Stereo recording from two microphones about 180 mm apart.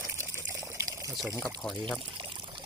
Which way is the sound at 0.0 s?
15° right (ahead or behind).